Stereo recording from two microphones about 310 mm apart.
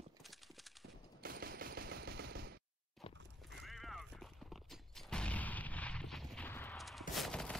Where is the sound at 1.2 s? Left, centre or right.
Right.